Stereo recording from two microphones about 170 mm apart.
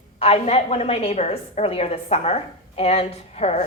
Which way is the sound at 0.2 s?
35° left (ahead or behind).